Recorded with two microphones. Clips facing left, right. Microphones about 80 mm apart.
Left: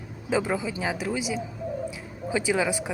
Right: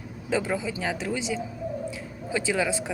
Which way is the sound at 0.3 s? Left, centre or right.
Centre.